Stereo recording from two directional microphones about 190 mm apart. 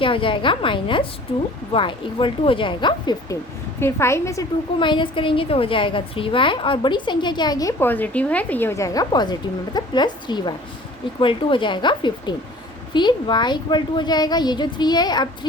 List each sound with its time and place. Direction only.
0.0 s a woman's voice: 25° left (ahead or behind)